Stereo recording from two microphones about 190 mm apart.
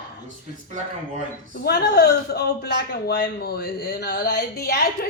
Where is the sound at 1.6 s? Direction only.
55° left (ahead or behind).